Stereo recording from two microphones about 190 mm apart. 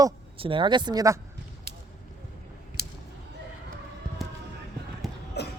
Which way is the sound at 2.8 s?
50° right (ahead or behind).